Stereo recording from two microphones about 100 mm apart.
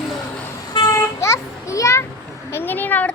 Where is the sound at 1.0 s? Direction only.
30° left (ahead or behind).